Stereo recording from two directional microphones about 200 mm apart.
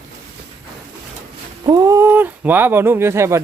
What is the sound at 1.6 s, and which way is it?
Speech, 20° right (ahead or behind).